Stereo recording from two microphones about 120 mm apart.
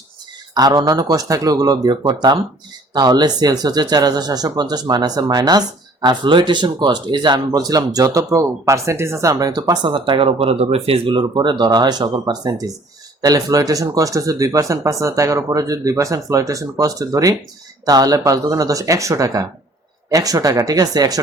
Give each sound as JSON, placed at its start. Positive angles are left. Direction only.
{"t": 0.5, "sound": "speech", "side_deg": -35}